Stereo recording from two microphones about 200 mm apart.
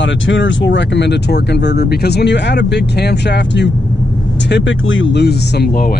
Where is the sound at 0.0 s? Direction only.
65° left (ahead or behind); by 5.9 s 50° left (ahead or behind).